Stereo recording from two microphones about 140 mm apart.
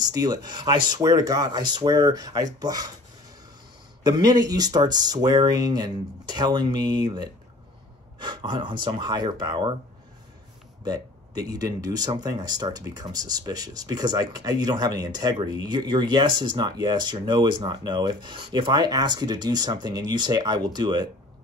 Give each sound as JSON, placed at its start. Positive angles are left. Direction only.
{"t": 0.0, "sound": "speech", "side_deg": -30}
{"t": 4.0, "sound": "speech", "side_deg": -30}
{"t": 10.8, "sound": "speech", "side_deg": -25}